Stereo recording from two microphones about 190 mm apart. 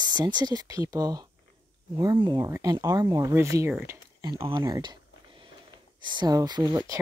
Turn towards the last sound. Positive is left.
turn(degrees=-20)  # may be behind; listen again after turning